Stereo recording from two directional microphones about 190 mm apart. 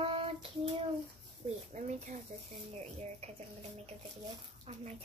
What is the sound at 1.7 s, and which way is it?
A woman's voice, 40° right (ahead or behind).